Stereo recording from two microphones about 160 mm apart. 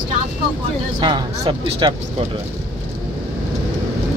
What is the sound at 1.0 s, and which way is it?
Music, 30° right (ahead or behind).